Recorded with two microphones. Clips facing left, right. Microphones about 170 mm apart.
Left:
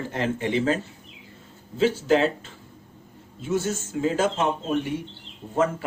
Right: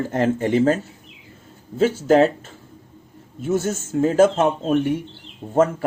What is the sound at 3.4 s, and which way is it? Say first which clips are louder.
Speech: right 4 dB; 50° right (ahead or behind).